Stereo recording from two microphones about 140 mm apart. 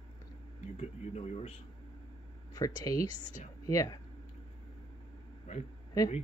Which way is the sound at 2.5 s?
25° left (ahead or behind).